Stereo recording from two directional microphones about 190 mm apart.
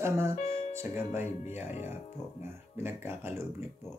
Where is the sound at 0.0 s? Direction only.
15° right (ahead or behind).